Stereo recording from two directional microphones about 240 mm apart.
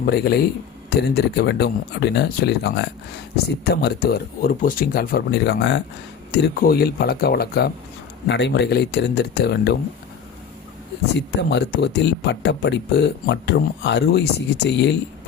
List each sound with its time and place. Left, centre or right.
0.0 s speech: left
11.3 s speech: left